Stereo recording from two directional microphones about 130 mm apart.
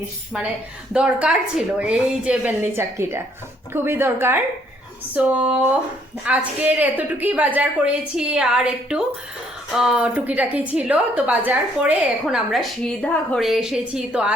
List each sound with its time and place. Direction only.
0.9 s a woman's voice: 10° right (ahead or behind)